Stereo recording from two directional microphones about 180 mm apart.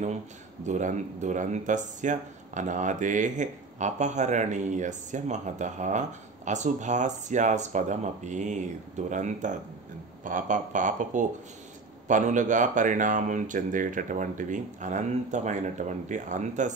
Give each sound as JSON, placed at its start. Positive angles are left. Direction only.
{"t": 0.7, "sound": "speech", "side_deg": -40}